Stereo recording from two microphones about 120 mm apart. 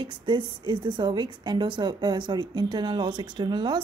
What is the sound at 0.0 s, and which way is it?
A woman's voice, 40° right (ahead or behind).